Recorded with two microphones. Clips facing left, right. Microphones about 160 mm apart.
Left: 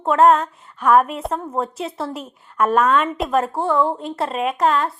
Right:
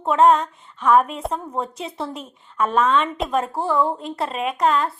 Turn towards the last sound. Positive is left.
turn(degrees=0)  # may be behind; listen again after turning